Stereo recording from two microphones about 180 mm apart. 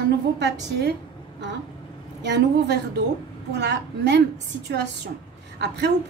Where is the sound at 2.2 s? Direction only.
75° right (ahead or behind).